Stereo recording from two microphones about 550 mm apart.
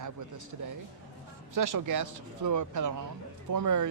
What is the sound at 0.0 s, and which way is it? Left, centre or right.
A man's voice, right.